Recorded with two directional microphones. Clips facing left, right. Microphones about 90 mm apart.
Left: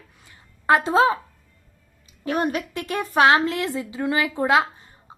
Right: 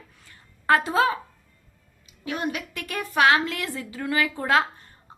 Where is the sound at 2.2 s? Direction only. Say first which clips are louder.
Left 5 dB; 45° left (ahead or behind).